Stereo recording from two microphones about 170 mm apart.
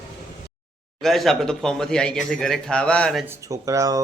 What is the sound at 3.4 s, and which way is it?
Speech, 20° right (ahead or behind).